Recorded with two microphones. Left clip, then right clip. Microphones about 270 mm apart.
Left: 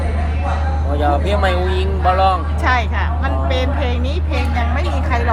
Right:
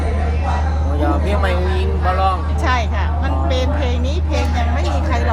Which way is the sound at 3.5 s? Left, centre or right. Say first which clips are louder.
Even; centre.